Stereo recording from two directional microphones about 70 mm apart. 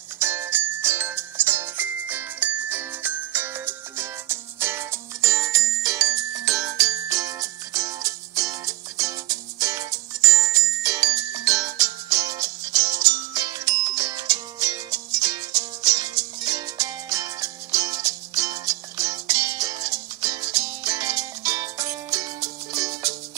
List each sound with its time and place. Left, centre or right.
0.2 s music: right